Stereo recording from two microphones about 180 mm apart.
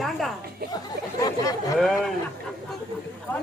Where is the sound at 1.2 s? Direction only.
20° left (ahead or behind).